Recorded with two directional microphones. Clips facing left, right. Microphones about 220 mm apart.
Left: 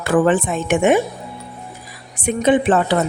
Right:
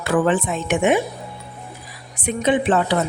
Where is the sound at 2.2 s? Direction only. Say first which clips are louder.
Left 4 dB; 50° left (ahead or behind).